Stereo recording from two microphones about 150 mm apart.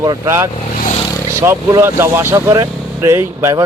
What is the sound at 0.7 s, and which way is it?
Vehicle, 60° left (ahead or behind).